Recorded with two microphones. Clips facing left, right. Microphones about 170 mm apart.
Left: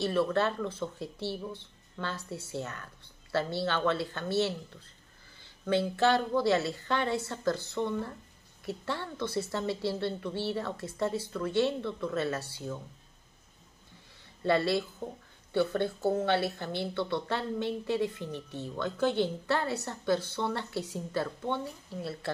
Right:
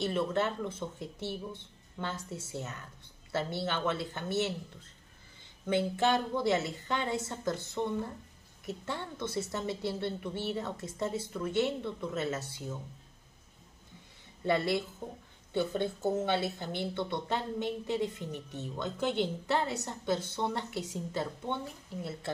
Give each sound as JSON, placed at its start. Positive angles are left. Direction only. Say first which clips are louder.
{"t": 0.0, "sound": "speech", "louder": "left 3 dB", "side_deg": -20}
{"t": 5.7, "sound": "speech", "louder": "left 2 dB", "side_deg": -20}
{"t": 14.4, "sound": "speech", "louder": "left 2 dB", "side_deg": -20}